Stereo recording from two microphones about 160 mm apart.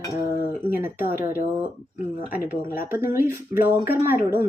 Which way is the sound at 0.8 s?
15° right (ahead or behind).